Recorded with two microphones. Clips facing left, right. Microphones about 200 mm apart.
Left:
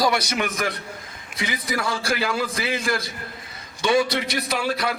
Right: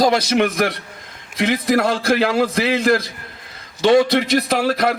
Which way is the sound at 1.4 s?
70° right (ahead or behind).